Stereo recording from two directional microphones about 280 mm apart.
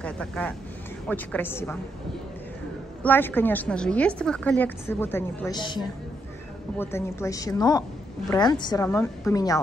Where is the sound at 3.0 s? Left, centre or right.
Centre.